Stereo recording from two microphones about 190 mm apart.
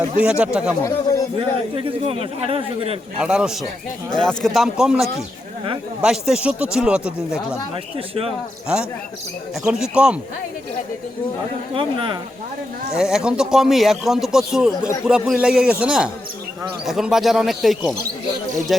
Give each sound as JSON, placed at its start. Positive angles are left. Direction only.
{"t": 0.2, "sound": "speech", "side_deg": -5}
{"t": 0.8, "sound": "speech", "side_deg": 15}
{"t": 1.4, "sound": "a man's voice", "side_deg": -30}
{"t": 3.2, "sound": "speech", "side_deg": -5}
{"t": 7.9, "sound": "speech", "side_deg": -30}
{"t": 8.6, "sound": "speech", "side_deg": -5}
{"t": 11.7, "sound": "a man's voice", "side_deg": -25}
{"t": 13.0, "sound": "speech", "side_deg": -5}